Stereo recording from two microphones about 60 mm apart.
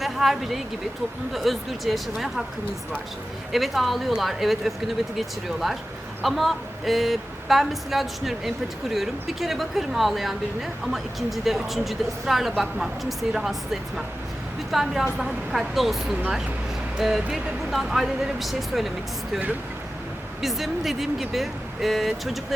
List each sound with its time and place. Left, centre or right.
0.0 s a woman's voice: centre
3.5 s a woman's voice: centre
17.2 s a woman's voice: centre
20.4 s a woman's voice: centre